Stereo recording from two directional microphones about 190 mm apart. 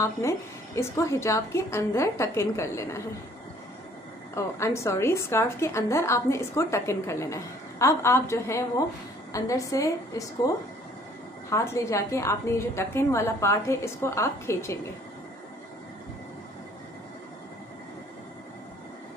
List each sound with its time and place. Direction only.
0.0 s a woman's voice: 15° left (ahead or behind)
4.4 s a woman's voice: 15° left (ahead or behind)
11.5 s a woman's voice: 15° left (ahead or behind)